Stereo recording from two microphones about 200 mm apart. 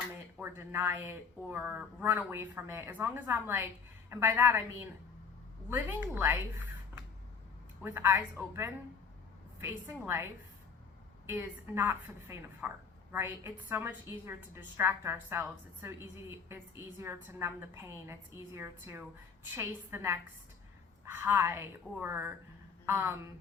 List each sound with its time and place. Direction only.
0.3 s a woman's voice: 10° right (ahead or behind)
7.8 s a woman's voice: 10° right (ahead or behind)
11.3 s a woman's voice: 10° right (ahead or behind)
21.2 s a woman's voice: 10° right (ahead or behind)